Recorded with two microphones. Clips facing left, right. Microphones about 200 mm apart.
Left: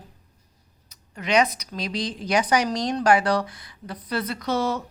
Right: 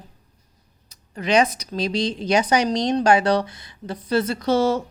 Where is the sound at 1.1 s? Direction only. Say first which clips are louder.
Right 3 dB; 30° right (ahead or behind).